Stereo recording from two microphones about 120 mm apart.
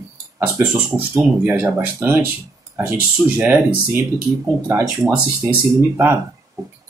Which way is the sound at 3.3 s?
15° right (ahead or behind).